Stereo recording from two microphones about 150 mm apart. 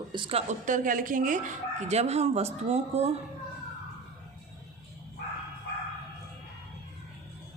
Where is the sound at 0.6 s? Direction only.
60° right (ahead or behind).